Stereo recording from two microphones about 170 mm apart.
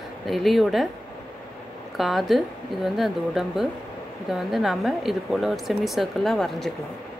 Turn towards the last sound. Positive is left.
turn(degrees=0)  # may be behind; listen again after turning